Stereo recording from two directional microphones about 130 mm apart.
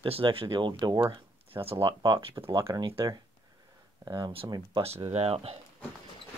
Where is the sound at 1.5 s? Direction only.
45° right (ahead or behind).